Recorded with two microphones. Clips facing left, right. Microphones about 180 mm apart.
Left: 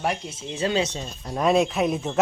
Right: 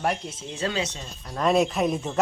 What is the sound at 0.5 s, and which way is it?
Speech, 20° left (ahead or behind).